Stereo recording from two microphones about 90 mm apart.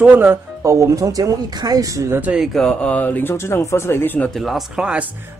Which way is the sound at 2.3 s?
Centre (ahead or behind).